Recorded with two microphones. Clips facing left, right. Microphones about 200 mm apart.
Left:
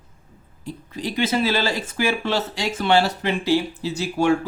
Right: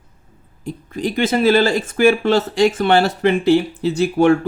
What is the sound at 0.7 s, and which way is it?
Speech, 50° right (ahead or behind).